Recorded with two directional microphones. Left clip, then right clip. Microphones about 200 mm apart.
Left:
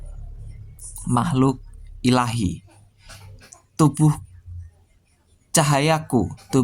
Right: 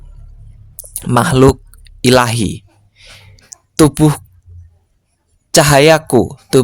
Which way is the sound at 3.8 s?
50° right (ahead or behind).